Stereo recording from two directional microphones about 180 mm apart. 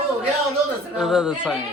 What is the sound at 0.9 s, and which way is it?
Speech, centre (ahead or behind).